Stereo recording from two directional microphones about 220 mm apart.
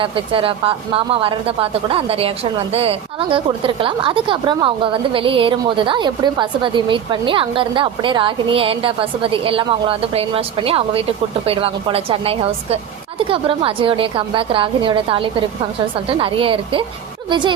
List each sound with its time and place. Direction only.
0.0 s a woman's voice: 25° right (ahead or behind)